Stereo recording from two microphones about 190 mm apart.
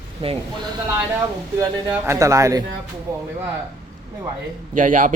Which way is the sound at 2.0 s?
15° right (ahead or behind).